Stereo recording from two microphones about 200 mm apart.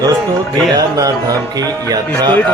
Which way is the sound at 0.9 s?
15° right (ahead or behind).